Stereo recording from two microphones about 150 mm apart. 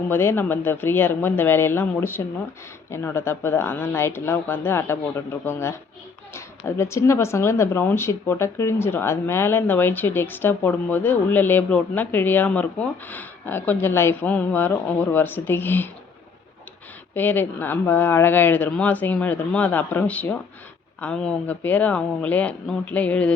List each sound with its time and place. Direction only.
0.1 s speech: 15° left (ahead or behind)
17.2 s speech: 10° left (ahead or behind)